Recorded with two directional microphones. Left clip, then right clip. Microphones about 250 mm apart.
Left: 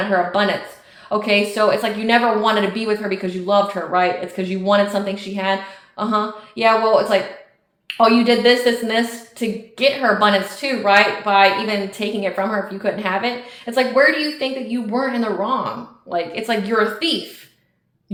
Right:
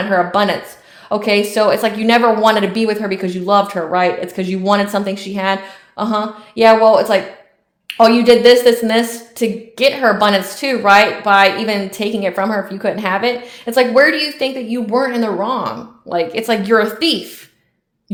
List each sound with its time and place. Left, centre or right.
0.1 s a woman's voice: right